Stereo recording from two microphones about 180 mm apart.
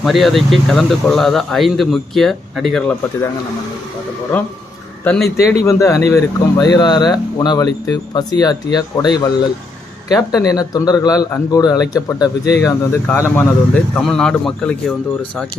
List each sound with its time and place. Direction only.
0.0 s speech: centre (ahead or behind)
4.3 s speech: 5° left (ahead or behind)
5.6 s speech: 20° left (ahead or behind)